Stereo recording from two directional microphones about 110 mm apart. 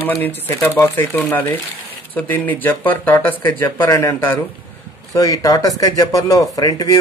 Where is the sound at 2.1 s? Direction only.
15° left (ahead or behind).